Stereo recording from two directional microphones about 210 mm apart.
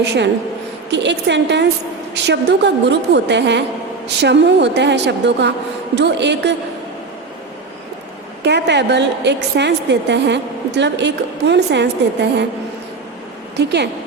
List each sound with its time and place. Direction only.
0.9 s a woman's voice: 55° right (ahead or behind)
8.4 s a woman's voice: 55° right (ahead or behind)
13.6 s a woman's voice: 55° right (ahead or behind)